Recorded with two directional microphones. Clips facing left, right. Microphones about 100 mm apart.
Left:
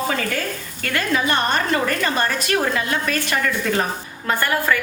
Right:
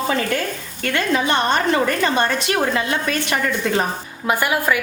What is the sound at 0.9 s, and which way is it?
A woman's voice, 25° right (ahead or behind).